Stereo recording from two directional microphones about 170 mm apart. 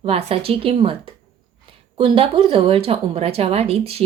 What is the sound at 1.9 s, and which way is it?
Speech, 30° right (ahead or behind).